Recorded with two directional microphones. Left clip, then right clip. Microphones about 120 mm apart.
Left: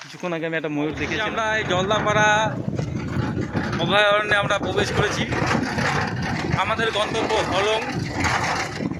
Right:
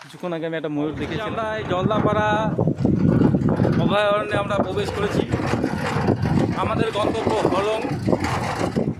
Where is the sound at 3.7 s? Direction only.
10° right (ahead or behind).